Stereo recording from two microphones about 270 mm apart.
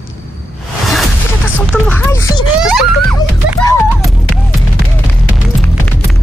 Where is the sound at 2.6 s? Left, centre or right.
Centre.